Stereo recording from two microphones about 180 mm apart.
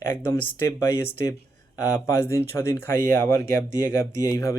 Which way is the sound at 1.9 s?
15° left (ahead or behind).